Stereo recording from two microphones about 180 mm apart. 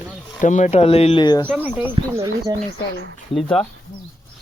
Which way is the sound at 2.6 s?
70° right (ahead or behind).